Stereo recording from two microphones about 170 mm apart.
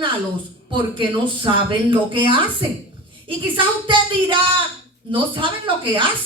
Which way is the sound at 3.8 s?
30° right (ahead or behind).